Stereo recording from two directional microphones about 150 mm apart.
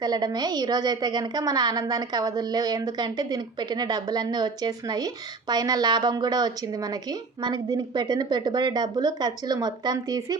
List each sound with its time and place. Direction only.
0.0 s a woman's voice: 25° right (ahead or behind)